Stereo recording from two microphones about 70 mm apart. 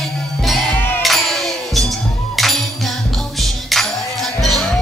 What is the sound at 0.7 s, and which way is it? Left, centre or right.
Music, left.